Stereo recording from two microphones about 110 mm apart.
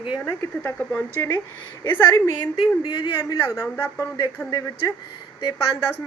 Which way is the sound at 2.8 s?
40° left (ahead or behind).